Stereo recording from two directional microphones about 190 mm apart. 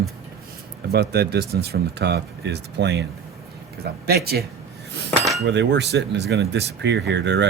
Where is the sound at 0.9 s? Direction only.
60° right (ahead or behind).